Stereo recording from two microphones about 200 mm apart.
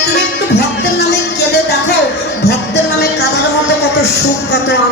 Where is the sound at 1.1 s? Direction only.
55° left (ahead or behind).